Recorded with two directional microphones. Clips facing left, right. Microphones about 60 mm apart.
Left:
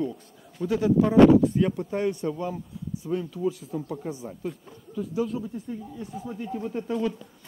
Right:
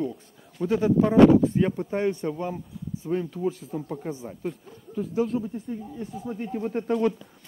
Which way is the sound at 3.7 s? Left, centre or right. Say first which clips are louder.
Even; right.